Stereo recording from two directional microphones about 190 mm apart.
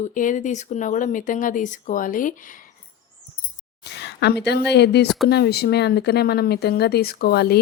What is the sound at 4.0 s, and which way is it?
Speech, 60° left (ahead or behind).